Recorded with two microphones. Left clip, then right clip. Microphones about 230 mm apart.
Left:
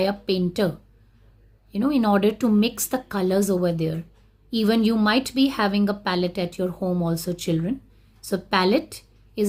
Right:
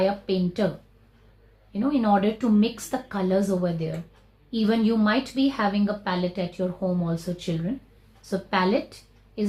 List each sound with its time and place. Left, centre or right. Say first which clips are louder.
0.0 s a woman's voice: left 1 dB; left
1.7 s a woman's voice: left 1 dB; left